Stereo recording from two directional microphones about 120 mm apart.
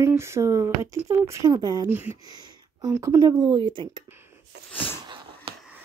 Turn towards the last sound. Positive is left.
turn(degrees=-50)  # may be behind; listen again after turning